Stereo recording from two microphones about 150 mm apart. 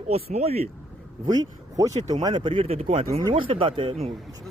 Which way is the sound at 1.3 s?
25° right (ahead or behind).